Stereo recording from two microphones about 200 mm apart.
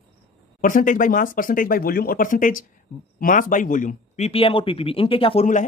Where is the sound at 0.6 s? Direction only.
40° left (ahead or behind).